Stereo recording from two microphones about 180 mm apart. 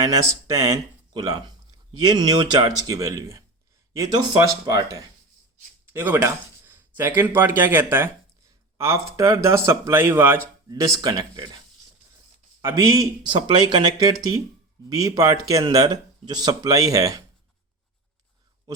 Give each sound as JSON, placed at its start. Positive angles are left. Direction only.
{"t": 0.0, "sound": "speech", "side_deg": -20}
{"t": 12.6, "sound": "speech", "side_deg": -20}